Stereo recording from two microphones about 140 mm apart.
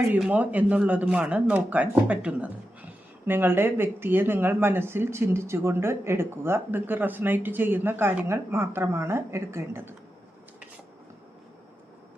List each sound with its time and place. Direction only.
0.2 s speech: 10° right (ahead or behind)